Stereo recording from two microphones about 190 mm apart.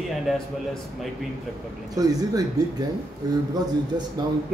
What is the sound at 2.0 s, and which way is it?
Speech, 20° right (ahead or behind).